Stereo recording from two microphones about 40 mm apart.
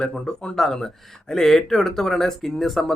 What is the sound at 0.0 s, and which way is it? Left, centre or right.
Speech, left.